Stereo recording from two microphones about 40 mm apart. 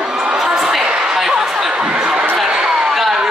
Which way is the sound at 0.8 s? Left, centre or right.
Right.